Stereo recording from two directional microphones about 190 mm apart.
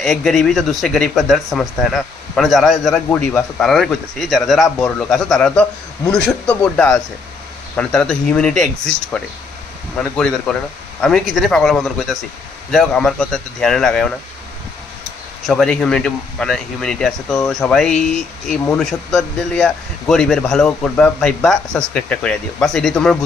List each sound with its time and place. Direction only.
0.0 s speech: centre (ahead or behind)
15.4 s speech: 5° left (ahead or behind)